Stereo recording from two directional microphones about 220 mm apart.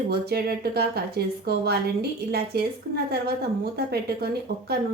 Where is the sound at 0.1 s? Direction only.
45° right (ahead or behind).